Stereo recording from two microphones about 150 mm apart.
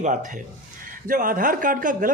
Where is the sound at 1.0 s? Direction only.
65° right (ahead or behind).